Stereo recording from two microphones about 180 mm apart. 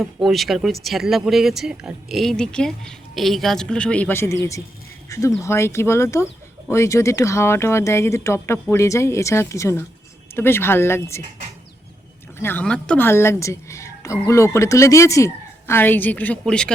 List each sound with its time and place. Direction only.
0.3 s a woman's voice: centre (ahead or behind)
12.4 s a woman's voice: 10° left (ahead or behind)